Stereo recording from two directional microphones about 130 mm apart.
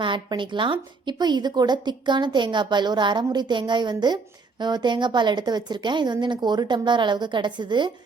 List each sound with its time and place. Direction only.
0.0 s speech: 40° right (ahead or behind)